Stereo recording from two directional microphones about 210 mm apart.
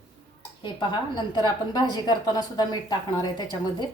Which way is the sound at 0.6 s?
20° left (ahead or behind).